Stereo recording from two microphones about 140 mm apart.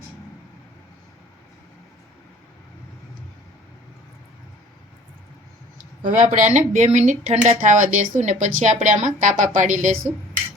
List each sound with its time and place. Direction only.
6.0 s speech: 70° right (ahead or behind)